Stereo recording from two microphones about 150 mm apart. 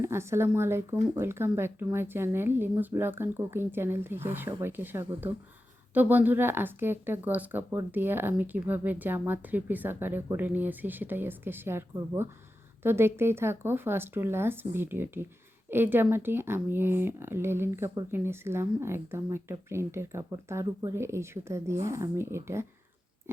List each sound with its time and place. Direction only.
0.0 s speech: 15° right (ahead or behind)